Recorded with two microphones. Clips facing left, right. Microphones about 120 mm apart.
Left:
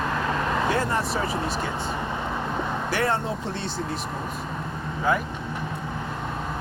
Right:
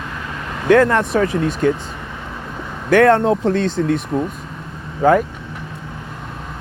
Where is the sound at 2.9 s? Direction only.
80° right.